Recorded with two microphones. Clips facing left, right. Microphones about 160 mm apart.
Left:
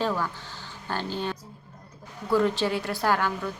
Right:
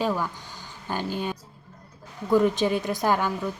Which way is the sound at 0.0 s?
15° right (ahead or behind).